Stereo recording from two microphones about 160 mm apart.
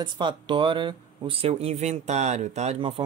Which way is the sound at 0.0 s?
30° right (ahead or behind).